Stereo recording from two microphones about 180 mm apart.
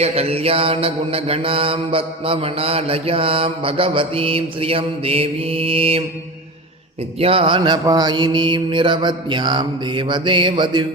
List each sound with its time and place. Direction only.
0.0 s mantra: 35° right (ahead or behind)
7.2 s mantra: 30° right (ahead or behind)